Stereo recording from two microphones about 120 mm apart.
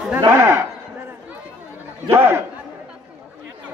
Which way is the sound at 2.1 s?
20° right (ahead or behind).